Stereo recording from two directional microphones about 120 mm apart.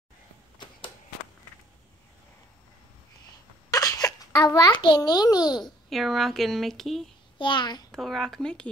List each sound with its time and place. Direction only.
0.6 s a sound: 45° left (ahead or behind)
3.7 s a sound: 30° left (ahead or behind)
4.8 s a child's voice: 40° left (ahead or behind)
5.9 s speech: centre (ahead or behind)
7.3 s a child's voice: 40° left (ahead or behind)
7.9 s speech: centre (ahead or behind)